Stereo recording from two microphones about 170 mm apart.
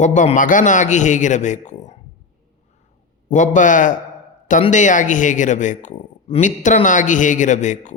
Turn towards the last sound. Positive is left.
turn(degrees=45)  # may be behind; listen again after turning